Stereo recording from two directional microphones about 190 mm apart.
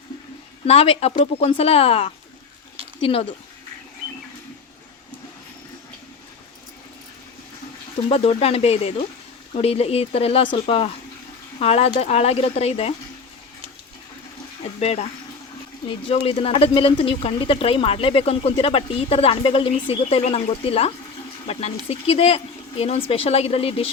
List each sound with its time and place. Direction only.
0.6 s speech: 30° left (ahead or behind)
8.1 s speech: 30° left (ahead or behind)
14.6 s speech: 35° left (ahead or behind)